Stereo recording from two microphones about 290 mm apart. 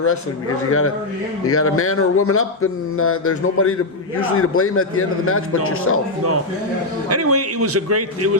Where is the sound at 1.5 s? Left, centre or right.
Left.